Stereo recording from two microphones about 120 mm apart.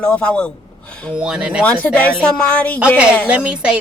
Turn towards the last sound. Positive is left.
turn(degrees=-10)  # may be behind; listen again after turning